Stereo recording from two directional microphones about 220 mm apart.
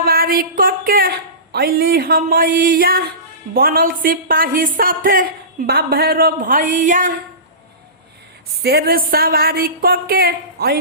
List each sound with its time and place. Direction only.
0.0 s a woman's voice: 45° right (ahead or behind)
8.6 s speech: 45° right (ahead or behind)